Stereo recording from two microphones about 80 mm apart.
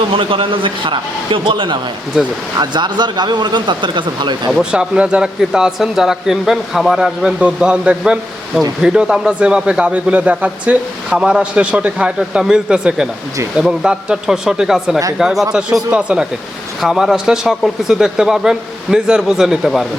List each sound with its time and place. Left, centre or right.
0.2 s speech: right
2.6 s speech: right
4.5 s a man's voice: centre
16.8 s a man's voice: centre